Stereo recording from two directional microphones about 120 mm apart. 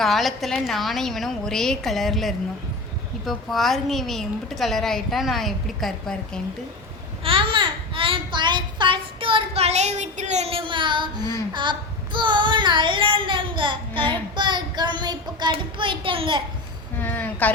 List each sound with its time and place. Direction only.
0.0 s a woman's voice: centre (ahead or behind)
7.3 s a sound: 45° right (ahead or behind)
11.5 s child singing: 40° right (ahead or behind)
15.5 s a child's voice: 45° right (ahead or behind)
17.0 s speech: 15° left (ahead or behind)